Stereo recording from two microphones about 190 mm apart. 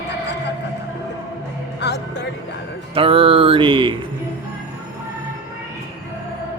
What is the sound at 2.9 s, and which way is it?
Speech, 30° right (ahead or behind).